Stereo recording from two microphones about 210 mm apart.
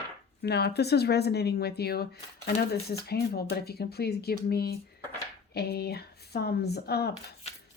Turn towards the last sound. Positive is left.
turn(degrees=50)  # may be behind; listen again after turning